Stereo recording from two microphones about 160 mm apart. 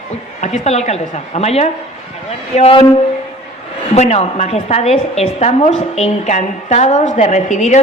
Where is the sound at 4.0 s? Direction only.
40° left (ahead or behind).